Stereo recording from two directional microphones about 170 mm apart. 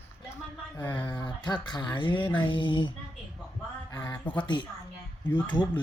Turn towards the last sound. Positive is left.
turn(degrees=25)  # may be behind; listen again after turning